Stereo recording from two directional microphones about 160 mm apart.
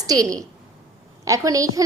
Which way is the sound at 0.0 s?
20° right (ahead or behind).